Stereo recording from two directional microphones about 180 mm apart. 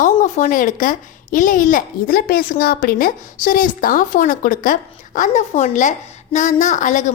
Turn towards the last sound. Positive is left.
turn(degrees=45)  # may be behind; listen again after turning